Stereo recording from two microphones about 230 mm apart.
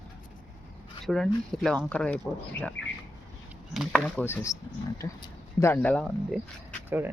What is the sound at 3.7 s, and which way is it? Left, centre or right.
Speech, centre.